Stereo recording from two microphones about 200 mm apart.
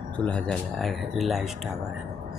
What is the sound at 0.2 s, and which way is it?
Speech, 5° left (ahead or behind).